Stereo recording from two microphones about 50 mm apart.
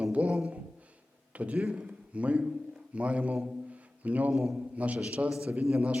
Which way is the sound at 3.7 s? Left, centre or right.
Right.